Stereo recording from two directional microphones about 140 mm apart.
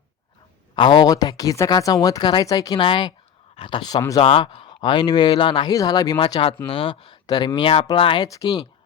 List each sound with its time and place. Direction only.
0.8 s speech: 35° left (ahead or behind)
4.2 s speech: 40° left (ahead or behind)